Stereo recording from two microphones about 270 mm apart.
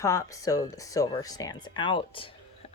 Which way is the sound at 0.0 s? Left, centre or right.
Centre.